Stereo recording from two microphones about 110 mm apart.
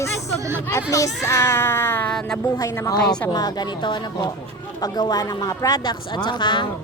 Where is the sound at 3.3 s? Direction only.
35° left (ahead or behind).